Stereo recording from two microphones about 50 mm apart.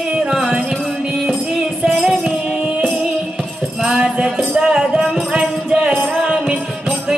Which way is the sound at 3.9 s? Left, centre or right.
Centre.